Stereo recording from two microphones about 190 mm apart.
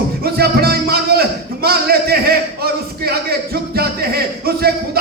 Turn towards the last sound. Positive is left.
turn(degrees=-55)  # may be behind; listen again after turning